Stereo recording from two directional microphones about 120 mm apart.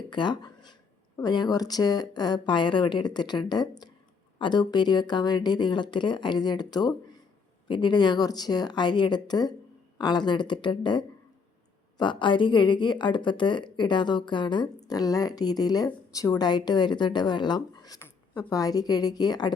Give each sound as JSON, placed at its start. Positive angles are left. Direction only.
{"t": 0.1, "sound": "speech", "side_deg": 40}
{"t": 14.8, "sound": "speech", "side_deg": 30}